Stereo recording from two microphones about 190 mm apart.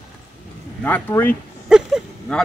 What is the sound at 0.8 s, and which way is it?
Speech, 10° left (ahead or behind).